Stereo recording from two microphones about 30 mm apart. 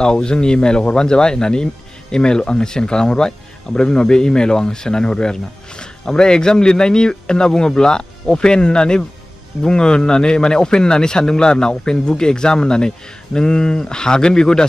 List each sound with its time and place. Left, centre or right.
0.0 s a man's voice: left